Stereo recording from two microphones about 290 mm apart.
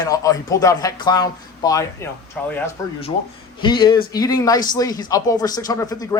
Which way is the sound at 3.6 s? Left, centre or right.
Centre.